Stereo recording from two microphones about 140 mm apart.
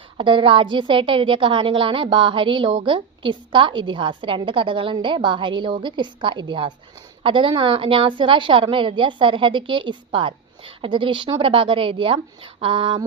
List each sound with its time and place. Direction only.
0.2 s a woman's voice: 35° right (ahead or behind)